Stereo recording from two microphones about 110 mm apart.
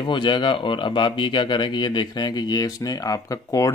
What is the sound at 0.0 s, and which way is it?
Speech, 45° left (ahead or behind).